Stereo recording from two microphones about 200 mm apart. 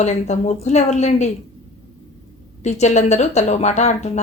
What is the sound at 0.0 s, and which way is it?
Speech, 35° left (ahead or behind).